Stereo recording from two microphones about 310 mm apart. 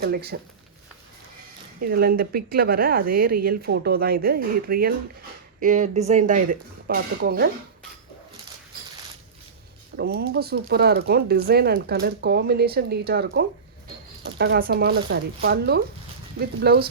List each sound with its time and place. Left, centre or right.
0.0 s speech: right
1.8 s speech: right
10.0 s speech: right